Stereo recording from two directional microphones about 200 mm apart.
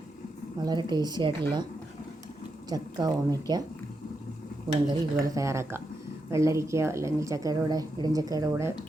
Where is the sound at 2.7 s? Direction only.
20° right (ahead or behind).